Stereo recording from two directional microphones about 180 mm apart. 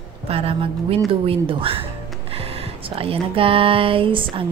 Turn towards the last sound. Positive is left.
turn(degrees=-30)  # may be behind; listen again after turning